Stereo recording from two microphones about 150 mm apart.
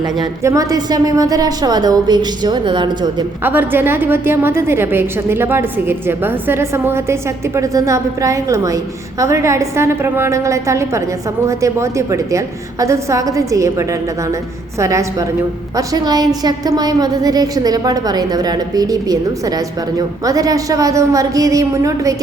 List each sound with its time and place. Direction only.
0.0 s a woman's voice: 25° right (ahead or behind)
3.4 s a woman's voice: 15° right (ahead or behind)